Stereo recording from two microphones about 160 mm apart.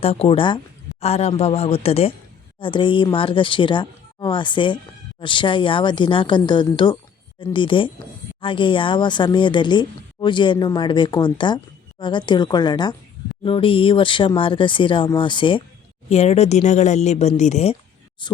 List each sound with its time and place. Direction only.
0.0 s speech: 40° left (ahead or behind)
16.0 s speech: 40° left (ahead or behind)